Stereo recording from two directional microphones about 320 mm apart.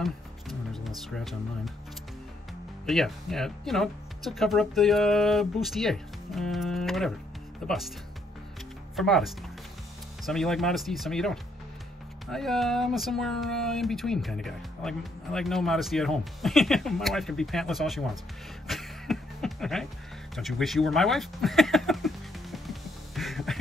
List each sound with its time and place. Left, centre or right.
0.0 s music: centre
2.9 s speech: centre
8.9 s speech: centre
18.7 s a sound: centre